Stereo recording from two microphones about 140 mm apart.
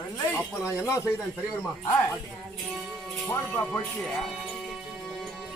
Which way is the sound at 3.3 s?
15° left (ahead or behind).